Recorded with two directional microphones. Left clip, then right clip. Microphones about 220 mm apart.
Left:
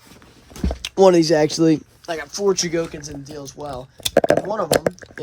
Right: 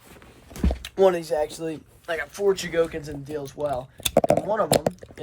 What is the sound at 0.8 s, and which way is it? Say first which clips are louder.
Speech: left 7 dB; 25° left (ahead or behind).